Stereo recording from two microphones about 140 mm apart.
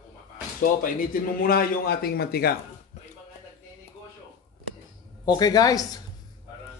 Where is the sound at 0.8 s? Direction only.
85° left.